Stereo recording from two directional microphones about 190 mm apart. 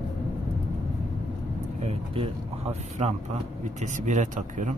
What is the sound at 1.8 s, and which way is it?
Vehicle, 30° right (ahead or behind).